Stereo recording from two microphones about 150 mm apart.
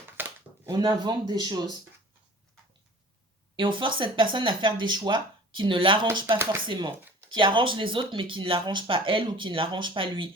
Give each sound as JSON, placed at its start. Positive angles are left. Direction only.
{"t": 0.2, "sound": "a sound", "side_deg": -15}
{"t": 0.7, "sound": "speech", "side_deg": -30}
{"t": 3.5, "sound": "speech", "side_deg": -35}